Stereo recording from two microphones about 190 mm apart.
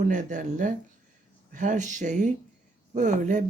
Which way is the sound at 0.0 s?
40° right (ahead or behind).